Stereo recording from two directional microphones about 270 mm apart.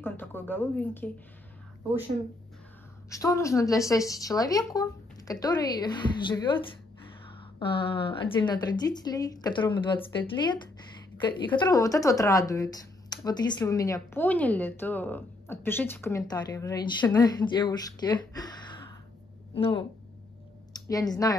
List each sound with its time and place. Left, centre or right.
0.0 s a woman's voice: centre
3.1 s speech: centre